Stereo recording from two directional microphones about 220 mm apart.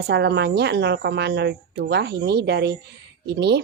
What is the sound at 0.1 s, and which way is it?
A woman's voice, 50° right (ahead or behind).